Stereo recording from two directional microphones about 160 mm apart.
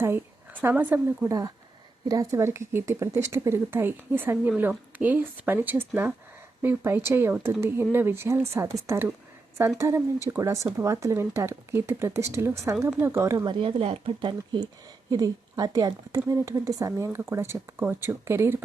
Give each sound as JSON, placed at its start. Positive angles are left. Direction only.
{"t": 0.6, "sound": "speech", "side_deg": -10}